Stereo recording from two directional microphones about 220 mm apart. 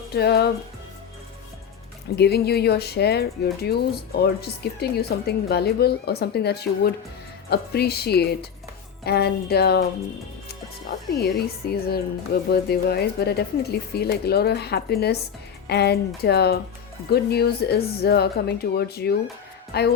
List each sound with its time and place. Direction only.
0.1 s speech: 45° left (ahead or behind)
2.1 s speech: 45° left (ahead or behind)
11.2 s speech: 45° left (ahead or behind)